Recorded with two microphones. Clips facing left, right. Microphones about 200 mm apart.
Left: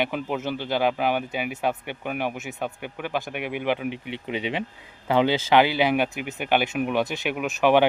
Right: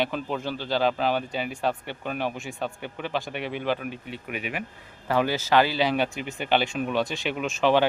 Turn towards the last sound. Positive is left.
turn(degrees=15)  # may be behind; listen again after turning